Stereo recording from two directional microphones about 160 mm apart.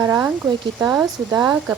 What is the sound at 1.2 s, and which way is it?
Speech, 20° right (ahead or behind).